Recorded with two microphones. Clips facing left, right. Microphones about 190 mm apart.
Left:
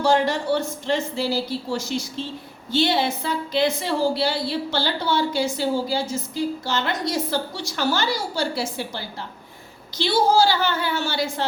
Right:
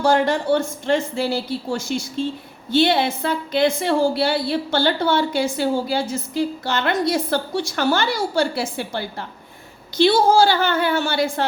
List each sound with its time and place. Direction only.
0.0 s a woman's voice: 50° right (ahead or behind)